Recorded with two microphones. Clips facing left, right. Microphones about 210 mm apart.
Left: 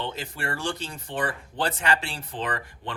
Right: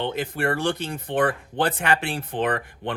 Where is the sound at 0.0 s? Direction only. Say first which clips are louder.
Right 7 dB; 55° right (ahead or behind).